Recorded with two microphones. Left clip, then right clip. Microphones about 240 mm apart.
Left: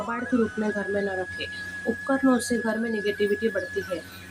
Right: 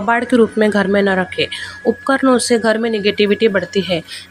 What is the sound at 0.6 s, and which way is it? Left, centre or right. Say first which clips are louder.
Speech: right 13 dB; right.